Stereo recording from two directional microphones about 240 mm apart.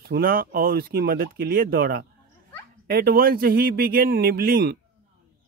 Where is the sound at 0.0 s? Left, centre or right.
Right.